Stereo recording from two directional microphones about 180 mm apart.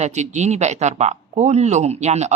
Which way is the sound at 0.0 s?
40° right (ahead or behind).